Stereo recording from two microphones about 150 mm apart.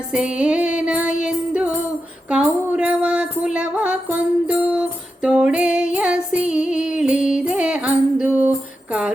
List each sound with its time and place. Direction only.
0.1 s music: 5° right (ahead or behind)